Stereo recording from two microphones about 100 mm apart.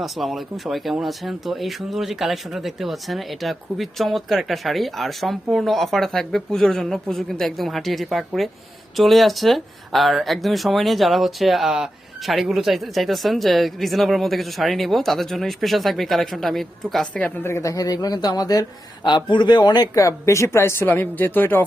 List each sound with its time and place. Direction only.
0.0 s speech: centre (ahead or behind); by 19.9 s 45° left (ahead or behind)
19.9 s speech: 30° left (ahead or behind)